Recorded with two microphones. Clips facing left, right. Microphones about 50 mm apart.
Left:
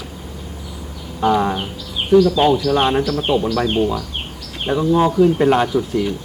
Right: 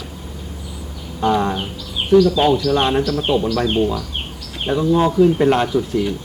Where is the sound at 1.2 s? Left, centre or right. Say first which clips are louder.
Left 1 dB; centre.